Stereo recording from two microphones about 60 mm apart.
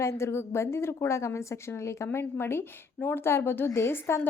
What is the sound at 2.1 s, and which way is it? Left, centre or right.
Speech, left.